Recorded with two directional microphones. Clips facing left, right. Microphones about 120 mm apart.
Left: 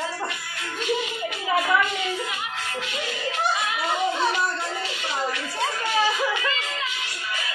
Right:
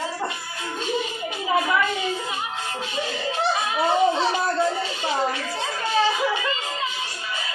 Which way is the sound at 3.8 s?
30° right (ahead or behind).